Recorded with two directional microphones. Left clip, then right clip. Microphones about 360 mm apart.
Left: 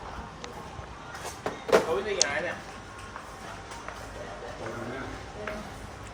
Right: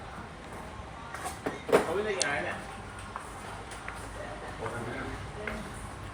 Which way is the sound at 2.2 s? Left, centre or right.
Left.